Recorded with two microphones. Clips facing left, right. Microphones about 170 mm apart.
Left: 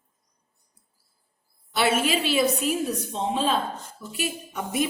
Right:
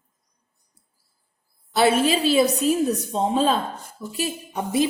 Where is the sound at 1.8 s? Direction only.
35° right (ahead or behind).